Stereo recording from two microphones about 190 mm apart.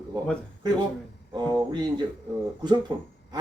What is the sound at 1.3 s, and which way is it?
Speech, 25° right (ahead or behind).